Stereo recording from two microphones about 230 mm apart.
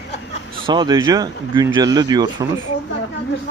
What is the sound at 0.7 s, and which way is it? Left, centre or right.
Speech, centre.